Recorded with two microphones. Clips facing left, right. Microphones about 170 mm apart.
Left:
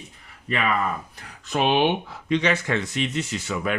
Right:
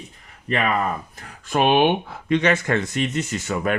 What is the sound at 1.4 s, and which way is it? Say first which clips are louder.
Speech: right 3 dB; 55° right (ahead or behind).